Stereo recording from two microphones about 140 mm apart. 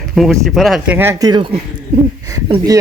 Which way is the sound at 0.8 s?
15° right (ahead or behind).